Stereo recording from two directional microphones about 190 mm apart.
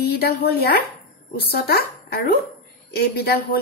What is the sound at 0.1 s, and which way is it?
A woman's voice, 55° left (ahead or behind).